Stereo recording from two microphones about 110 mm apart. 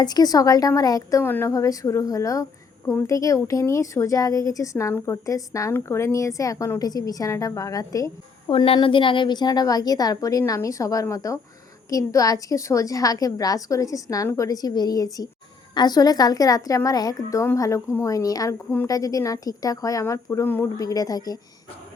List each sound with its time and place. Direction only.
0.0 s a woman's voice: 35° left (ahead or behind)
1.2 s a woman's voice: 20° left (ahead or behind)
8.4 s a woman's voice: 55° left (ahead or behind); by 20.7 s 20° left (ahead or behind)
20.7 s a woman's voice: 35° left (ahead or behind)